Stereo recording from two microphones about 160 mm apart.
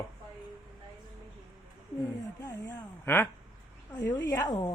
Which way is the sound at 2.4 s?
20° left (ahead or behind).